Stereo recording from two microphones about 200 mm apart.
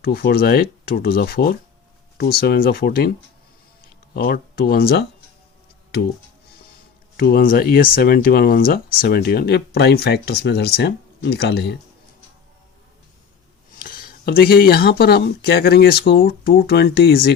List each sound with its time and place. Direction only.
0.0 s speech: 50° left (ahead or behind)
7.2 s speech: 50° left (ahead or behind)
13.7 s speech: 45° left (ahead or behind)